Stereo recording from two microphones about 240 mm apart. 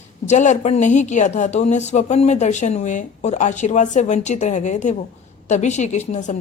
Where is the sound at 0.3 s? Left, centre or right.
Left.